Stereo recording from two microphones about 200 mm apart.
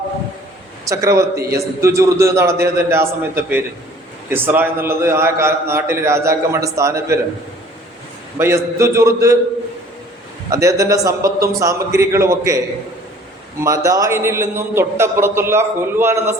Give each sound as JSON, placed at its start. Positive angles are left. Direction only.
{"t": 0.9, "sound": "a man's voice", "side_deg": -15}
{"t": 8.4, "sound": "a man's voice", "side_deg": -15}
{"t": 10.5, "sound": "a man's voice", "side_deg": -15}
{"t": 13.6, "sound": "a man's voice", "side_deg": -15}